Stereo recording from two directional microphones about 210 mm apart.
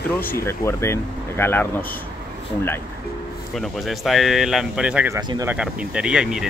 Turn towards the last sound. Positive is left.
turn(degrees=-5)  # may be behind; listen again after turning